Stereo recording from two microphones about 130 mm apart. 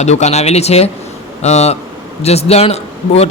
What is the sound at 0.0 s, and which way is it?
A man's voice, 60° left (ahead or behind).